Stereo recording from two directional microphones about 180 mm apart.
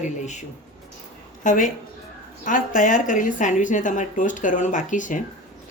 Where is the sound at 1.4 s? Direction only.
45° left (ahead or behind).